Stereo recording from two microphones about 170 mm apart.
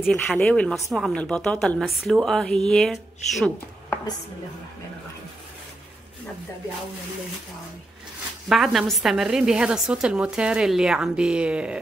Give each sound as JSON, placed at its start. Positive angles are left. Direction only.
{"t": 0.0, "sound": "a woman's voice", "side_deg": 5}
{"t": 8.5, "sound": "a woman's voice", "side_deg": 0}